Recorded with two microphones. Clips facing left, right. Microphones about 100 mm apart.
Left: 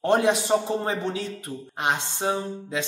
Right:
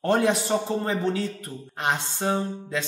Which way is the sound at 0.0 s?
20° left (ahead or behind).